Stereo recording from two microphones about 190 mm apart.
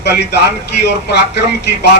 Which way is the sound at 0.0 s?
60° left (ahead or behind).